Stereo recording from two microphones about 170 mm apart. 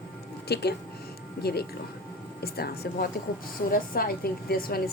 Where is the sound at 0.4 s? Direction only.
75° left (ahead or behind).